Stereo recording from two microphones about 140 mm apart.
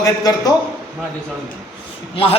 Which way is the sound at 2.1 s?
40° left (ahead or behind).